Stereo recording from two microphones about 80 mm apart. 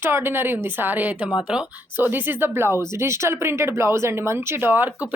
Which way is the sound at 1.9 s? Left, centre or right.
Right.